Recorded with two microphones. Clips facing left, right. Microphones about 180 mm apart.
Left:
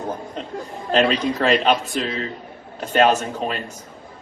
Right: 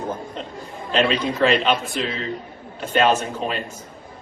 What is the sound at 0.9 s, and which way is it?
A man's voice, 40° left (ahead or behind).